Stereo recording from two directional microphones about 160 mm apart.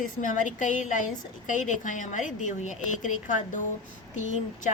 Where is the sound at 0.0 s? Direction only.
55° left (ahead or behind).